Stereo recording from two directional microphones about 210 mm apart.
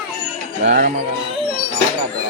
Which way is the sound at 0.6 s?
35° right (ahead or behind).